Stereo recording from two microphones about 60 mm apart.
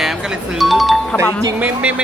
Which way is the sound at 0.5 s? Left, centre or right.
Centre.